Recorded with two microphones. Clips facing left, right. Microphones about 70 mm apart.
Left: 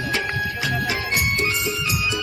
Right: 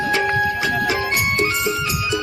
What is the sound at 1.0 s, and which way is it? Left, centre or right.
Music, right.